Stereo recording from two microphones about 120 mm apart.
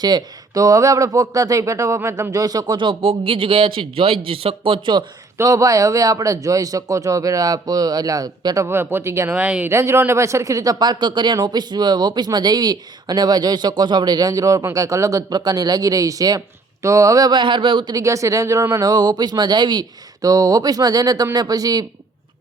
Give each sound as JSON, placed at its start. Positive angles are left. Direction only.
{"t": 0.0, "sound": "speech", "side_deg": -35}
{"t": 5.4, "sound": "speech", "side_deg": -25}
{"t": 8.6, "sound": "speech", "side_deg": -20}
{"t": 17.9, "sound": "speech", "side_deg": -25}